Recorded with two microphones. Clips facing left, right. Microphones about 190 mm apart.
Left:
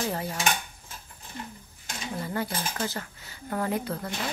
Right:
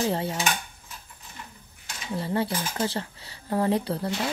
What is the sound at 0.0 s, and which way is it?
Speech, 30° right (ahead or behind).